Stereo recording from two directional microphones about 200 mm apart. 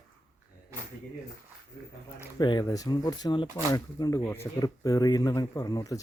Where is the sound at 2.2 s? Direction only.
20° left (ahead or behind).